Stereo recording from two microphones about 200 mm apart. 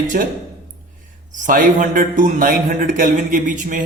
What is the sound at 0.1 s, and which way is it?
A man's voice, 45° right (ahead or behind).